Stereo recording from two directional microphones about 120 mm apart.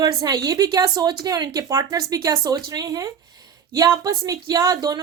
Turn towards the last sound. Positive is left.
turn(degrees=-35)  # may be behind; listen again after turning